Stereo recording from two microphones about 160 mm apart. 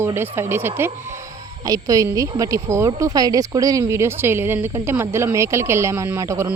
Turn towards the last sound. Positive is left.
turn(degrees=-20)  # may be behind; listen again after turning